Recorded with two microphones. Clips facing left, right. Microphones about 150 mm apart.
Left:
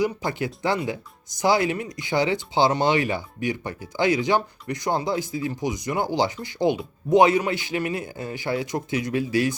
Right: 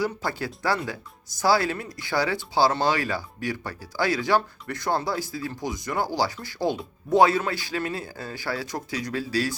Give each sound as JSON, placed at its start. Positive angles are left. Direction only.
{"t": 0.0, "sound": "speech", "side_deg": 20}